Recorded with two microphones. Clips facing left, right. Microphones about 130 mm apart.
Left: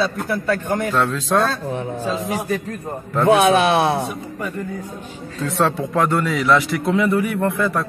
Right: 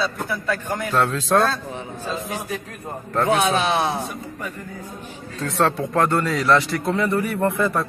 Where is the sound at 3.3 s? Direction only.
65° left (ahead or behind).